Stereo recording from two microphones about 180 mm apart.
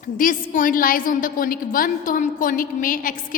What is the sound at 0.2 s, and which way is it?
A woman's voice, 50° left (ahead or behind).